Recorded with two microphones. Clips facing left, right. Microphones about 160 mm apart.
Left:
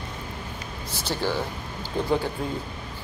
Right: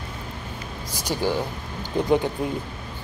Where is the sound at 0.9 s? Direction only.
15° right (ahead or behind).